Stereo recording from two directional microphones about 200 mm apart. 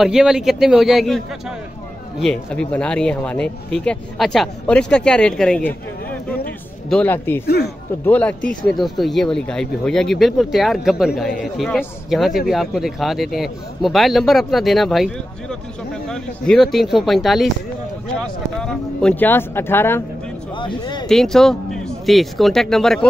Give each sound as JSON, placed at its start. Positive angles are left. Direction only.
{"t": 0.0, "sound": "speech", "side_deg": -5}
{"t": 2.2, "sound": "speech", "side_deg": 5}
{"t": 6.9, "sound": "speech", "side_deg": 10}
{"t": 7.4, "sound": "speech", "side_deg": 55}
{"t": 8.0, "sound": "speech", "side_deg": 10}
{"t": 18.6, "sound": "speech", "side_deg": 5}
{"t": 20.5, "sound": "speech", "side_deg": 20}
{"t": 21.1, "sound": "speech", "side_deg": 0}